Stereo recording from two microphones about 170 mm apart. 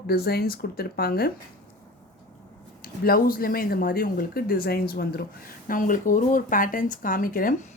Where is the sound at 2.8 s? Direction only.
60° left (ahead or behind).